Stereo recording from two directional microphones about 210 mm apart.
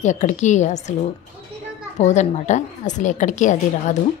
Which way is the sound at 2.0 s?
35° left (ahead or behind).